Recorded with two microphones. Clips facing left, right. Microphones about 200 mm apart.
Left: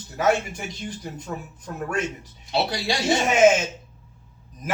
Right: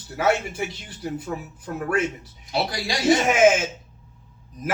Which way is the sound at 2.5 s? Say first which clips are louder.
Left 2 dB; 25° left (ahead or behind).